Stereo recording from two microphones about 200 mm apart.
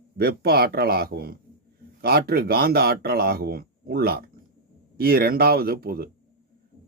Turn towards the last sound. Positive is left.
turn(degrees=-50)  # may be behind; listen again after turning